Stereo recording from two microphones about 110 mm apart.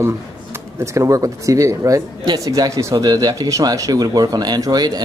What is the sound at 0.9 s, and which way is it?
Speech, 30° right (ahead or behind).